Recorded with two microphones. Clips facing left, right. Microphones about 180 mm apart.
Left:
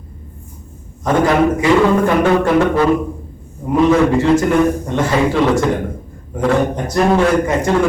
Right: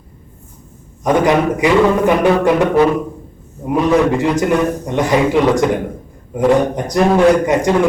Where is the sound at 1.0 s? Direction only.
15° right (ahead or behind).